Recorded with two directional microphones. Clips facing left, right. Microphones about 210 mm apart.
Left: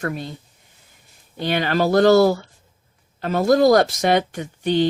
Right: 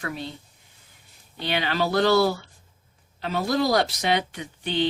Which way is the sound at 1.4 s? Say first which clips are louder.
Left 5 dB; 50° left (ahead or behind).